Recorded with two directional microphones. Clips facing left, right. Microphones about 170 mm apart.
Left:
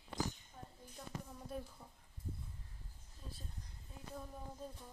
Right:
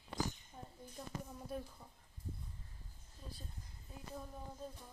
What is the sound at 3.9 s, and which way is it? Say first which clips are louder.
Speech: right 2 dB; centre (ahead or behind).